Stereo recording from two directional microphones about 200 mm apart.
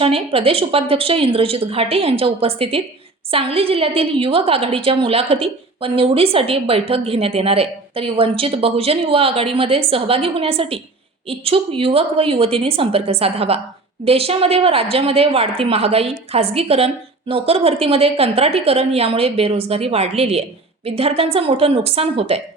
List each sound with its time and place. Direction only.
0.0 s a woman's voice: 30° right (ahead or behind)